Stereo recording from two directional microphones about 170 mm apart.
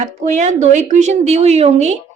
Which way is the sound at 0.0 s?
45° right (ahead or behind).